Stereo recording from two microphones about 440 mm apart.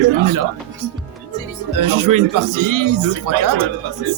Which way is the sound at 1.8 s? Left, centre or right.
Right.